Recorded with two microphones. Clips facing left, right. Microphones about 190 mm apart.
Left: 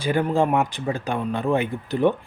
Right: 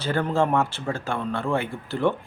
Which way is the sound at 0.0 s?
15° left (ahead or behind).